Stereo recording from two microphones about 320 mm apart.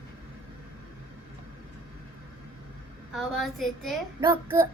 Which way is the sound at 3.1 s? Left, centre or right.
Centre.